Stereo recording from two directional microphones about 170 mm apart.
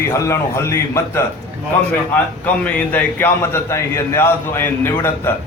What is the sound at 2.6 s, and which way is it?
A man's voice, 10° left (ahead or behind).